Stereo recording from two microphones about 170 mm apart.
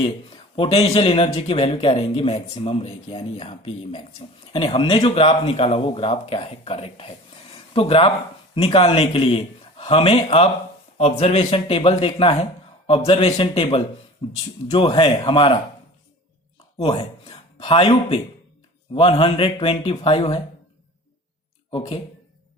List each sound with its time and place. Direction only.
0.5 s speech: 35° left (ahead or behind)
16.7 s speech: 35° left (ahead or behind)
21.7 s speech: 35° left (ahead or behind)